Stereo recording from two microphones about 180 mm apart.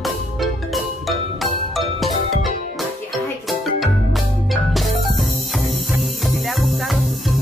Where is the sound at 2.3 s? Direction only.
45° right (ahead or behind).